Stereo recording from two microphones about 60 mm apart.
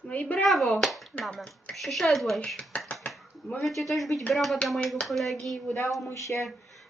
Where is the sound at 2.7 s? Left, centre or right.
Centre.